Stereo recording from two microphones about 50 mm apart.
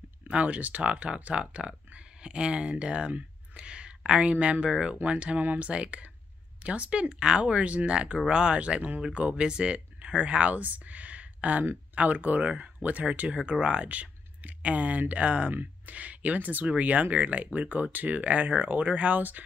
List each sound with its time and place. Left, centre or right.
0.3 s speech: right
7.5 s speech: right
13.3 s speech: right